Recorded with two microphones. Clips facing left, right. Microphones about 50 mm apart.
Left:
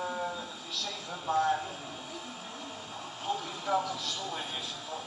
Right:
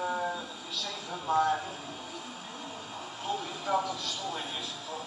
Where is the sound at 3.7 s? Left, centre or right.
Right.